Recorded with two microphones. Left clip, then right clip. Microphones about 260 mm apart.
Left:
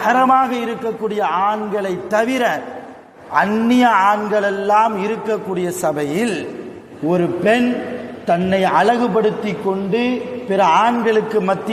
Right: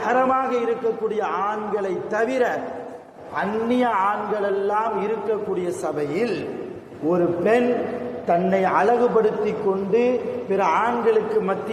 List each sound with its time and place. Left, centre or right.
0.0 s a man's voice: left